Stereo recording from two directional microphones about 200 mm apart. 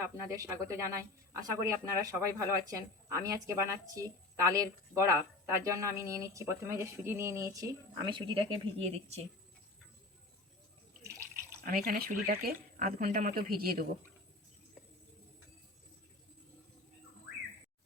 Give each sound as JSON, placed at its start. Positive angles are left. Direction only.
{"t": 0.0, "sound": "speech", "side_deg": -15}
{"t": 11.6, "sound": "speech", "side_deg": -45}